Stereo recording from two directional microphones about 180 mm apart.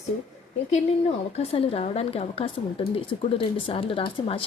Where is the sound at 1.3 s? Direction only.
35° left (ahead or behind).